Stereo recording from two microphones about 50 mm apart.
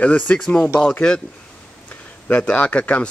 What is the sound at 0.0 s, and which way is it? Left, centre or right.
Speech, left.